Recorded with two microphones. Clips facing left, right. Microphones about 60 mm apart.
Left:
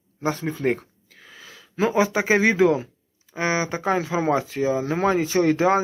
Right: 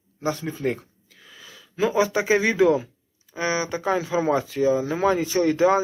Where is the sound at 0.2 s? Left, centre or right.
Left.